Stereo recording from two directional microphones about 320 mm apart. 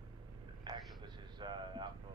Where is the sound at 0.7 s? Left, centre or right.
Centre.